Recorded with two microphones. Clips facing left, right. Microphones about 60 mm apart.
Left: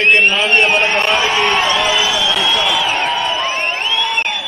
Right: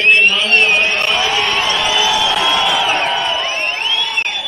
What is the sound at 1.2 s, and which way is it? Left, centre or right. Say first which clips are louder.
Speech: left 1 dB; left.